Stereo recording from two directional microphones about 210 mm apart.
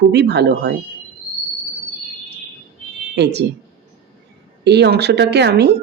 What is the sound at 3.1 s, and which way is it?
Speech, 55° right (ahead or behind).